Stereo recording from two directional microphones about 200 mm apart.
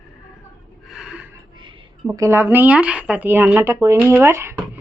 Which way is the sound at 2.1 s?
10° right (ahead or behind).